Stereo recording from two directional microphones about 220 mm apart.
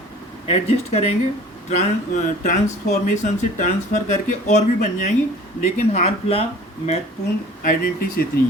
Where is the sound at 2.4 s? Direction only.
35° left (ahead or behind).